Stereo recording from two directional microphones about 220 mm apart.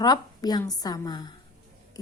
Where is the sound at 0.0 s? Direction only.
15° left (ahead or behind).